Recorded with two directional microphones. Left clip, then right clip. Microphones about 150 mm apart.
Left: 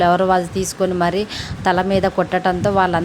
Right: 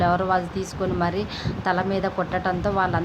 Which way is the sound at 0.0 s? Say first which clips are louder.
Left 6 dB; 55° left (ahead or behind).